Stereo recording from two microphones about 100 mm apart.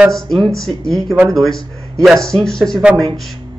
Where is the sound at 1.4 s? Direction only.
5° left (ahead or behind).